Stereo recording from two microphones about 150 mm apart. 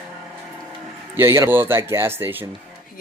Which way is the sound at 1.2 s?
20° right (ahead or behind).